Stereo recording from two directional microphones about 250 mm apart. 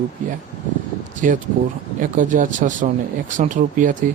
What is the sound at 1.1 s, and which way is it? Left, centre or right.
Speech, right.